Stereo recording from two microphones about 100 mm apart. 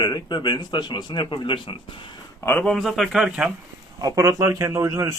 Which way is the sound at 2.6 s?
Centre (ahead or behind).